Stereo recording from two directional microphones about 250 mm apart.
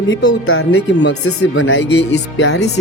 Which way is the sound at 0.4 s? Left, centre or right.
Left.